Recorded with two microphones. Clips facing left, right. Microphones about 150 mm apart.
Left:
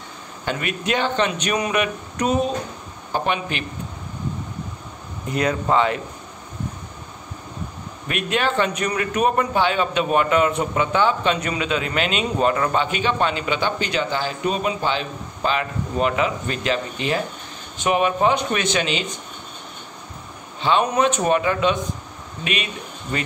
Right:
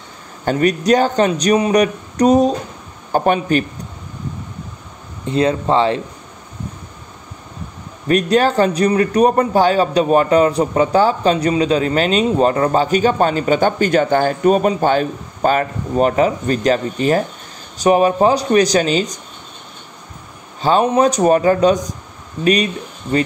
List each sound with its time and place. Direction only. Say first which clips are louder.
0.5 s a man's voice: right 10 dB; 40° right (ahead or behind)
5.2 s speech: right 6 dB; 30° right (ahead or behind)
8.1 s a man's voice: right 9 dB; 40° right (ahead or behind)
20.6 s a man's voice: right 5 dB; 35° right (ahead or behind)
23.1 s speech: right 10 dB; 30° right (ahead or behind)